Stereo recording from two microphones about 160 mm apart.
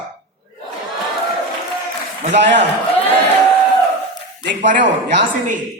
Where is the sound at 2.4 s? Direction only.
90° right.